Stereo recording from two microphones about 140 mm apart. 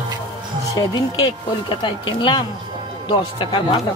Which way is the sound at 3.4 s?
40° left (ahead or behind).